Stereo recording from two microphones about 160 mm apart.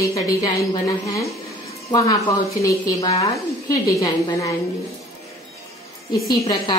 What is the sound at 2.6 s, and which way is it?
A woman's voice, 20° left (ahead or behind).